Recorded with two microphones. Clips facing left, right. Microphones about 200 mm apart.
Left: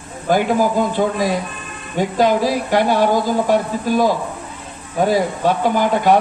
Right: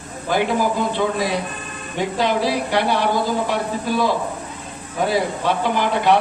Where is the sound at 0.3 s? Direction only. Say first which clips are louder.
Left 4 dB; 45° left (ahead or behind).